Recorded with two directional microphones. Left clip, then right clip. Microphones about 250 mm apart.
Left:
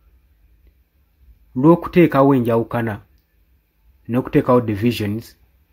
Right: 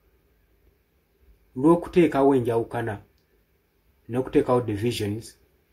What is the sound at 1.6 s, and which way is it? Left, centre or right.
A man's voice, left.